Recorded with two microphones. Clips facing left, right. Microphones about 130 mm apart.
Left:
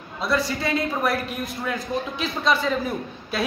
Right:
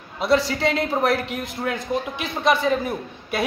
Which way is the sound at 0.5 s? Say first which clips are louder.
Right 3 dB; 80° right.